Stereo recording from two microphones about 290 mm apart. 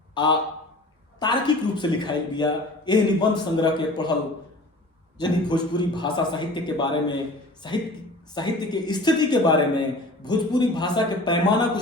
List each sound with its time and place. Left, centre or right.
0.1 s a man's voice: centre